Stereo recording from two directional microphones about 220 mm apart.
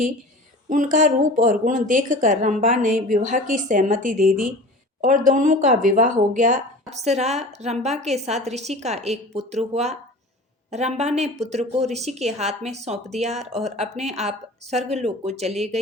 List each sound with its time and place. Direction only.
0.7 s a woman's voice: 35° right (ahead or behind)